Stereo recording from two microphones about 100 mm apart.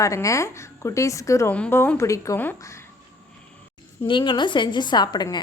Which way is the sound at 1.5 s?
10° left (ahead or behind).